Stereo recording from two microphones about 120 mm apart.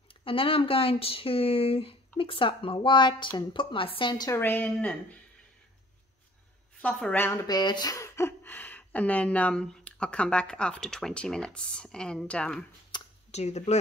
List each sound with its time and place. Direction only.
0.1 s speech: 50° left (ahead or behind)
4.3 s speech: 20° left (ahead or behind)
6.8 s speech: 10° left (ahead or behind)
7.4 s speech: 35° left (ahead or behind); by 12.6 s 10° left (ahead or behind)
12.9 s a sound: 40° left (ahead or behind)
13.3 s speech: 70° left (ahead or behind)